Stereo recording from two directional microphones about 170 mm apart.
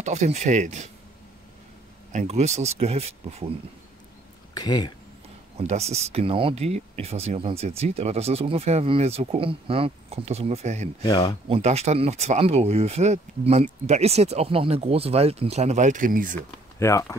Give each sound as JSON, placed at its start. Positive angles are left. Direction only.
{"t": 0.0, "sound": "speech", "side_deg": -40}
{"t": 2.1, "sound": "speech", "side_deg": -40}
{"t": 4.6, "sound": "speech", "side_deg": 25}
{"t": 5.6, "sound": "speech", "side_deg": -40}
{"t": 11.0, "sound": "speech", "side_deg": 25}
{"t": 11.4, "sound": "speech", "side_deg": -35}
{"t": 16.8, "sound": "speech", "side_deg": 15}